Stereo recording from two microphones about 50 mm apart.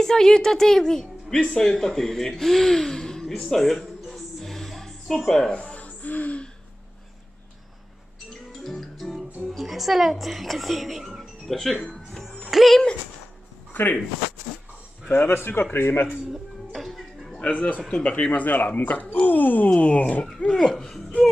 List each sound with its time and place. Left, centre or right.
0.0 s speech: centre
5.6 s a sound: left
8.3 s music: centre
9.6 s speech: centre
12.4 s music: centre
13.7 s speech: left
15.0 s a man's voice: left
16.7 s music: centre
17.4 s speech: left
20.5 s speech: centre